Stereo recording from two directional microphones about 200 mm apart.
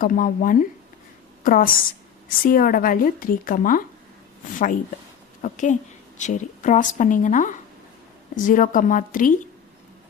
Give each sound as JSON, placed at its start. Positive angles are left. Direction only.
{"t": 0.0, "sound": "a woman's voice", "side_deg": 40}
{"t": 5.4, "sound": "a woman's voice", "side_deg": 40}